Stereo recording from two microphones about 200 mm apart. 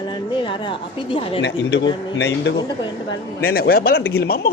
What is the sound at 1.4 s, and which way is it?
Speech, 60° left (ahead or behind).